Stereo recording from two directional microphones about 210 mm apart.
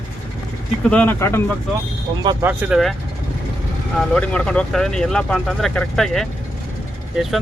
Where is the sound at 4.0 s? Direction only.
5° left (ahead or behind).